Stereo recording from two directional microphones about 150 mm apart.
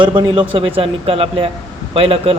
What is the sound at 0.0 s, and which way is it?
Speech, 30° right (ahead or behind).